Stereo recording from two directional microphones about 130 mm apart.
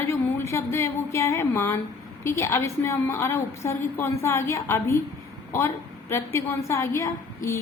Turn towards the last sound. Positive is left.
turn(degrees=25)  # may be behind; listen again after turning